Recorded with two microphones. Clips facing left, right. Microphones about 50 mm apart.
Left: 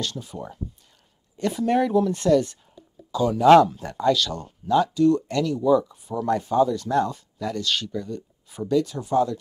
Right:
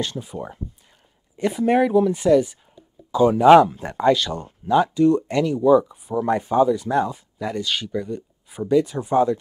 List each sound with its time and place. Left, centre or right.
0.0 s speech: right
3.1 s speech: right